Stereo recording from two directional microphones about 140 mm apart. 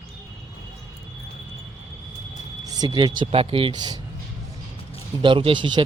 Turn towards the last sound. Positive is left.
turn(degrees=-35)  # may be behind; listen again after turning